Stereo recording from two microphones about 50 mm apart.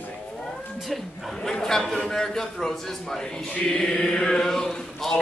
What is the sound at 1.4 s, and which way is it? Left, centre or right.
A man's voice, centre.